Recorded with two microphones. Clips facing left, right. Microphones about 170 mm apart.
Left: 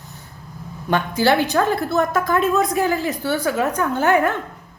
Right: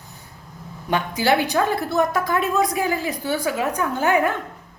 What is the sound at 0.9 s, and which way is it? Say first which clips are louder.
A woman's voice: left 2 dB; 15° right (ahead or behind).